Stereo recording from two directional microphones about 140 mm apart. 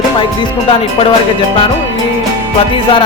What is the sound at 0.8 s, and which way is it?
Speech, 40° left (ahead or behind).